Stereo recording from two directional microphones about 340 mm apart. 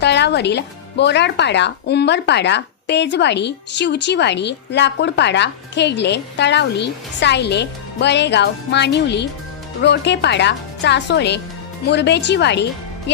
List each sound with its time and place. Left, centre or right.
0.0 s speech: left